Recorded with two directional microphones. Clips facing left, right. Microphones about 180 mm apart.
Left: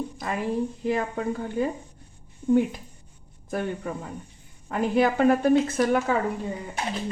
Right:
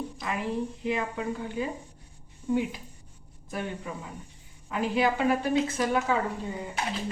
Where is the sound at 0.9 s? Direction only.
45° left (ahead or behind).